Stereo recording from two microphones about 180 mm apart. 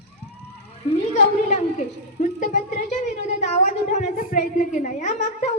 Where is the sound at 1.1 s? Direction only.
40° left (ahead or behind).